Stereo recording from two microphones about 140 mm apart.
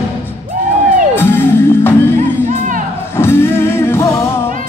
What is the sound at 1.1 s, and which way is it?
Music, 15° left (ahead or behind).